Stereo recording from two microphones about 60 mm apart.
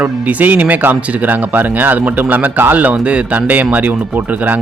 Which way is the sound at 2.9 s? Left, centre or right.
Centre.